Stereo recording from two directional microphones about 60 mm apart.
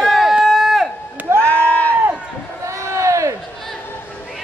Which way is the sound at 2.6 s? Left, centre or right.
Right.